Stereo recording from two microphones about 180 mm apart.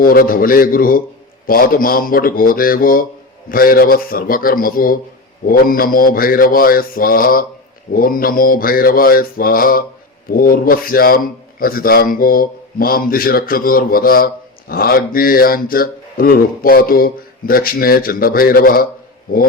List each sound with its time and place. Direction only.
0.0 s speech: 55° left (ahead or behind)